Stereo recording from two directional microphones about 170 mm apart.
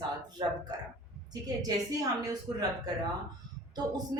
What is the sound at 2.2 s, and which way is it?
Speech, 20° right (ahead or behind).